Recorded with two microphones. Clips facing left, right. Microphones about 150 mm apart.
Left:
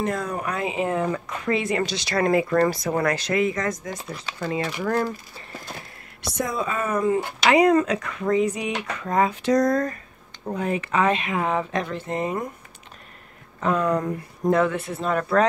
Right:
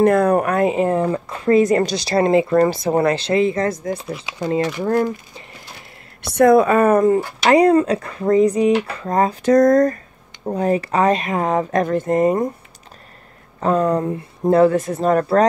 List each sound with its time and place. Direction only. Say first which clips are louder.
0.0 s speech: right 12 dB; 60° right (ahead or behind); by 5.4 s 25° right (ahead or behind)
6.3 s speech: right 15 dB; 65° right (ahead or behind); by 7.2 s 50° right (ahead or behind)
7.4 s speech: right 4 dB; 35° right (ahead or behind)
13.6 s speech: right 5 dB; 35° right (ahead or behind)